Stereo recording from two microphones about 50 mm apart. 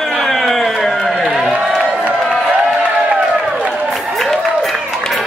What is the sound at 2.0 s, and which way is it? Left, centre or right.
Crowd, right.